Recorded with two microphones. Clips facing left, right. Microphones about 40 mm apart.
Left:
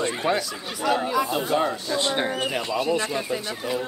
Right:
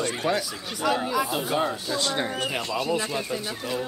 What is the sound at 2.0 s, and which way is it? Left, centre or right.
Speech, left.